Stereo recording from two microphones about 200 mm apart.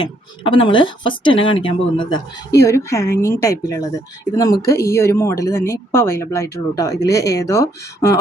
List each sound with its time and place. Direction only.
0.0 s a woman's voice: 25° left (ahead or behind)